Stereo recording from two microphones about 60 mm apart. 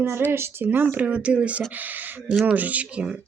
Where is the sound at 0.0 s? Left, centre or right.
Right; by 3.2 s centre.